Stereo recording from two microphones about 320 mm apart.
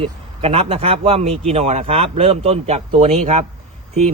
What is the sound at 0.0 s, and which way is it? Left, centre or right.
A man's voice, centre.